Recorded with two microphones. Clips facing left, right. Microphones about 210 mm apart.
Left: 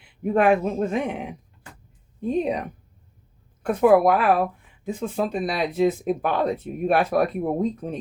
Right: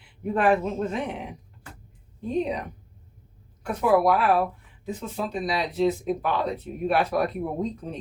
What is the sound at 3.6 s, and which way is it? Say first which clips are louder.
Speech: left 5 dB; 55° left (ahead or behind).